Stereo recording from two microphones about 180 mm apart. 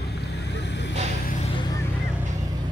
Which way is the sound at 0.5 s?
70° left (ahead or behind).